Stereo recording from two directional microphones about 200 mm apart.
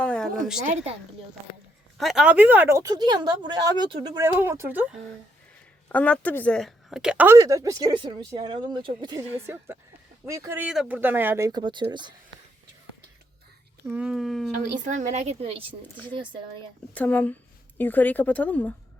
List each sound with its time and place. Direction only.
0.0 s a sound: 5° left (ahead or behind)
0.6 s speech: 35° right (ahead or behind)
2.0 s a woman's voice: centre (ahead or behind)
5.9 s a woman's voice: 5° left (ahead or behind); by 9.2 s 20° right (ahead or behind)
9.3 s a woman's voice: 10° right (ahead or behind)
13.8 s speech: 5° right (ahead or behind)
14.8 s speech: 40° right (ahead or behind)
15.8 s speech: 10° left (ahead or behind)